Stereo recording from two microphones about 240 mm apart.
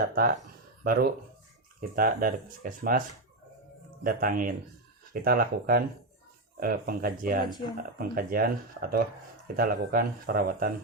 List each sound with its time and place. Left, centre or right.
0.1 s speech: right
4.0 s speech: right